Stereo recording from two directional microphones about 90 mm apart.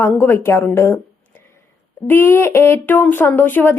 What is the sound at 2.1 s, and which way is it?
A woman's voice, 25° left (ahead or behind).